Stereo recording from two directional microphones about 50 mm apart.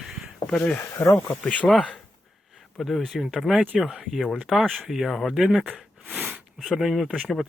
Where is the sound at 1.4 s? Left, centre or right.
Left.